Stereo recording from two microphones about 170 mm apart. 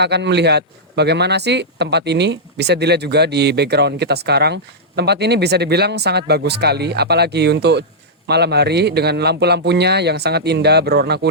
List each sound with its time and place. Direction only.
0.0 s speech: 85° right